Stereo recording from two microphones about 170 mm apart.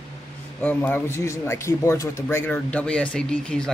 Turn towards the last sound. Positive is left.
turn(degrees=5)  # may be behind; listen again after turning